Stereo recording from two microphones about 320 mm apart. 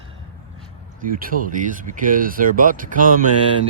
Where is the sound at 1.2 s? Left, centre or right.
Right.